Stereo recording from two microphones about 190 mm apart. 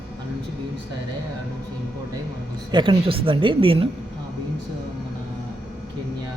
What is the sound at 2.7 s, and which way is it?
A man's voice, 25° right (ahead or behind).